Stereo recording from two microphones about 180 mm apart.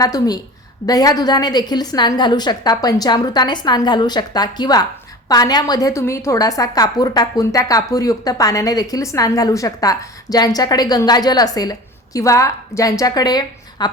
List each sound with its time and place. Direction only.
0.0 s a woman's voice: 20° left (ahead or behind)